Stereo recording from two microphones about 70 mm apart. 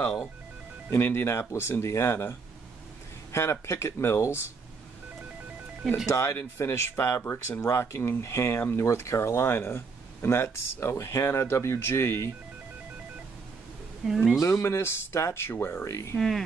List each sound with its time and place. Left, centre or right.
0.9 s speech: left
6.0 s speech: left
8.8 s speech: left
14.0 s speech: centre
14.4 s speech: left
15.9 s speech: left
16.2 s speech: centre